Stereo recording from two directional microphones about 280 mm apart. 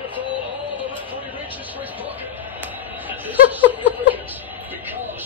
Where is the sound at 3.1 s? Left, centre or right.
Centre.